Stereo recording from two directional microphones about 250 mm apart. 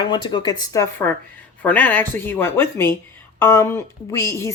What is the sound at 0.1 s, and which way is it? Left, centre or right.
A woman's voice, centre.